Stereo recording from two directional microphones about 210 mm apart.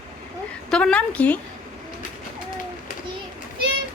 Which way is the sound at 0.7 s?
5° left (ahead or behind).